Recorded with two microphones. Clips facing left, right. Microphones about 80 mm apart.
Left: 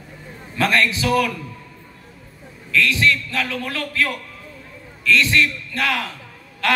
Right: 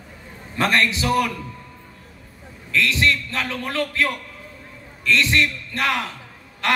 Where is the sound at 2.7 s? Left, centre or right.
Right.